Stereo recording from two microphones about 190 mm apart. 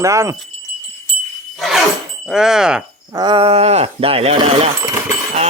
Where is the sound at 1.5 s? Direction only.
Centre (ahead or behind).